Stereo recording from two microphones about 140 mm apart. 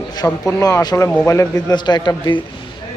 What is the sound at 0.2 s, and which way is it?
Speech, 15° left (ahead or behind).